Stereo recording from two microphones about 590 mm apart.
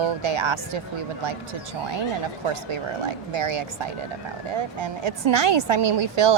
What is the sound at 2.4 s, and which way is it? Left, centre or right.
Speech, right.